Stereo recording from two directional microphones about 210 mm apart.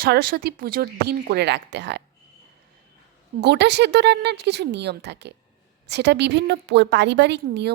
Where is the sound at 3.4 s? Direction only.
55° right (ahead or behind).